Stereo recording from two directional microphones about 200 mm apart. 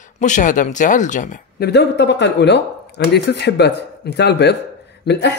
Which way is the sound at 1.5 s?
55° left (ahead or behind).